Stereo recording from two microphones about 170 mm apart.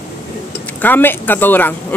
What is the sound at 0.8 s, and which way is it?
Speech, 10° left (ahead or behind).